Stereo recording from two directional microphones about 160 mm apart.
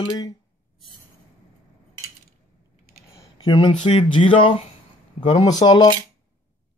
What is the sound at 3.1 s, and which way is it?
Speech, 25° left (ahead or behind).